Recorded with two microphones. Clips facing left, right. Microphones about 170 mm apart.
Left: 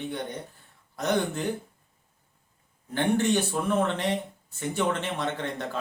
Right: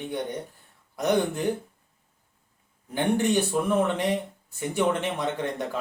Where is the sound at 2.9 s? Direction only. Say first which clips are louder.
Right 1 dB; 15° right (ahead or behind).